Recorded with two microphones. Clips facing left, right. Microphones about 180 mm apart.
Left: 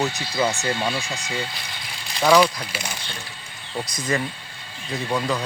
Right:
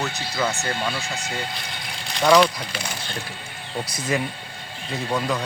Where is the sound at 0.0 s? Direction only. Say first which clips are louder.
Left 3 dB; 15° left (ahead or behind).